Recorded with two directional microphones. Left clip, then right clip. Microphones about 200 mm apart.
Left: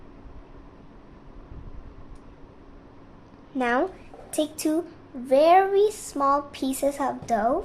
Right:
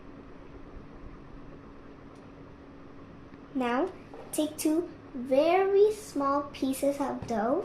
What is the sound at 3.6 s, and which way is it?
A child's voice, 30° left (ahead or behind).